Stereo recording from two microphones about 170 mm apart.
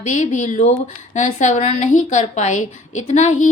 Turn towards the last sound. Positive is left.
turn(degrees=45)  # may be behind; listen again after turning